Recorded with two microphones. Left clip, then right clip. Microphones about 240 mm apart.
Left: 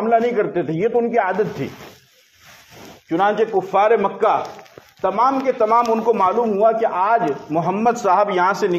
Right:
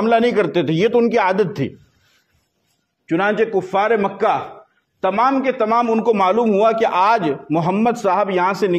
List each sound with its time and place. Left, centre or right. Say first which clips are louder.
0.0 s a man's voice: right 2 dB; right
3.1 s a man's voice: even; right